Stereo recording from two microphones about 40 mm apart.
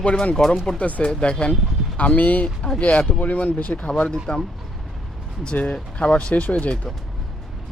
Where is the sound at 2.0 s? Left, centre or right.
Left.